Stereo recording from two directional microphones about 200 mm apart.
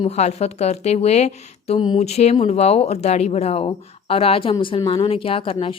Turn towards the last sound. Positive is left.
turn(degrees=25)  # may be behind; listen again after turning